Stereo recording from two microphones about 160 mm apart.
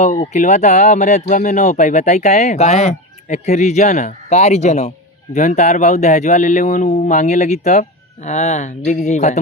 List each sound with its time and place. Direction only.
0.0 s speech: 45° left (ahead or behind)